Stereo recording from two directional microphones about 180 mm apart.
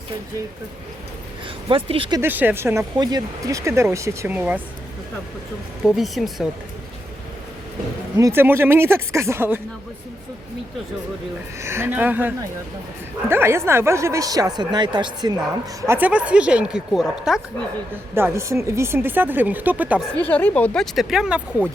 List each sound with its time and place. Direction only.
1.6 s speech: 30° right (ahead or behind)
2.2 s speech: 10° right (ahead or behind)
5.8 s speech: centre (ahead or behind)
8.2 s speech: 15° right (ahead or behind)
11.6 s speech: 15° right (ahead or behind)
15.9 s speech: 10° right (ahead or behind)
18.1 s speech: 15° right (ahead or behind)
20.2 s speech: 10° left (ahead or behind)